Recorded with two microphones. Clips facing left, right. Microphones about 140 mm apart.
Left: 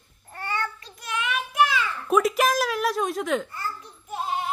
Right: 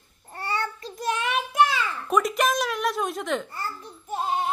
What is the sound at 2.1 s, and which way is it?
A woman's voice, 5° left (ahead or behind).